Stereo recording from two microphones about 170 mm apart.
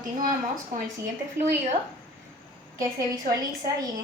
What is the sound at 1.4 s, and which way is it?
Speech, 15° right (ahead or behind).